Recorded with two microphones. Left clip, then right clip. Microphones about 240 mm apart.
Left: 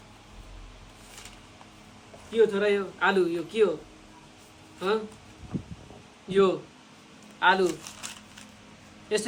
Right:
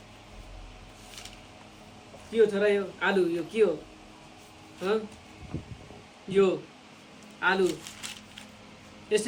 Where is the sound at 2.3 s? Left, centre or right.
Centre.